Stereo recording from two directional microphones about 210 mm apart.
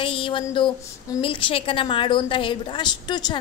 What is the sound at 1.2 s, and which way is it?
A woman's voice, 25° left (ahead or behind).